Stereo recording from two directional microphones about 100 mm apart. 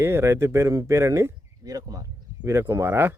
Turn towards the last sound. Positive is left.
turn(degrees=-25)  # may be behind; listen again after turning